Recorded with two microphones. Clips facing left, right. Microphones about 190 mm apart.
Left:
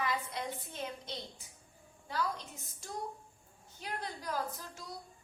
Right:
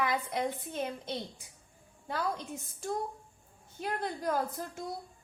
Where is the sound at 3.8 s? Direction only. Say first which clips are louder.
Right 7 dB; 55° right (ahead or behind).